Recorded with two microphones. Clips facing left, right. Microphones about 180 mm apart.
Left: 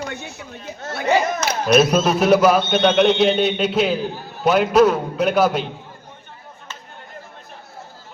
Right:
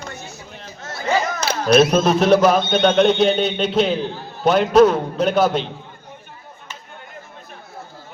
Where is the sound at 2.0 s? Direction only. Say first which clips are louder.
Right 1 dB; 5° left (ahead or behind).